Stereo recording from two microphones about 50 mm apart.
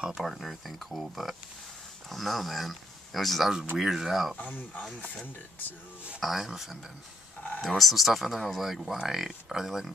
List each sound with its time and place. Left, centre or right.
0.1 s speech: centre
4.4 s speech: left
6.2 s speech: centre